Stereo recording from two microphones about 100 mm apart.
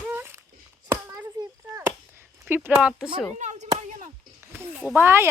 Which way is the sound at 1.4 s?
30° right (ahead or behind).